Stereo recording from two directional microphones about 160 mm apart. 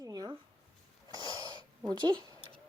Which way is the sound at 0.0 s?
25° right (ahead or behind).